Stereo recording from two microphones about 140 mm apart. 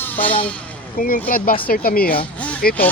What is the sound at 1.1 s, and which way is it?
Speech, 80° left.